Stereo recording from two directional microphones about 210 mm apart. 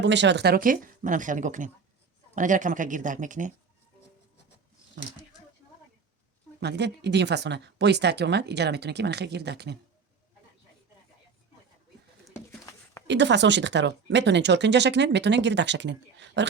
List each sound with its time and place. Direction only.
0.0 s speech: 55° right (ahead or behind); by 3.5 s 35° right (ahead or behind)
6.6 s speech: 55° right (ahead or behind)
12.3 s a sound: 15° left (ahead or behind)
13.1 s speech: 55° right (ahead or behind)